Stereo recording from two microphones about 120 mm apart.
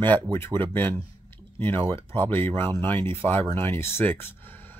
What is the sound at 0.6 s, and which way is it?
Speech, 15° left (ahead or behind).